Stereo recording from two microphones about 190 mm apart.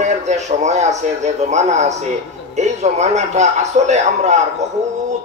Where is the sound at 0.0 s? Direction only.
35° right (ahead or behind).